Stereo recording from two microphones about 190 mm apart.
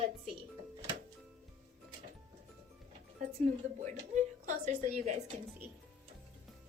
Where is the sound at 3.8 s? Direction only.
40° right (ahead or behind).